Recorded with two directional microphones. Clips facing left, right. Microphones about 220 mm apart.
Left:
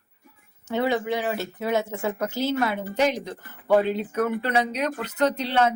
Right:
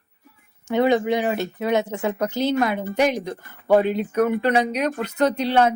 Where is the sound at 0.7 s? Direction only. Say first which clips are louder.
Right 5 dB; 20° right (ahead or behind).